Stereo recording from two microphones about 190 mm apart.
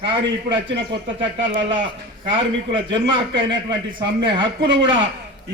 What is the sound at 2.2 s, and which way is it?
A man's voice, 25° right (ahead or behind).